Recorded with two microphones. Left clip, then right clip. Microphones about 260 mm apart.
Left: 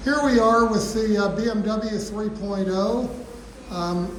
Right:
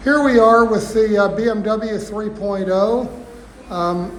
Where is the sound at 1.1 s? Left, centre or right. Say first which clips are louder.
Right 7 dB; centre.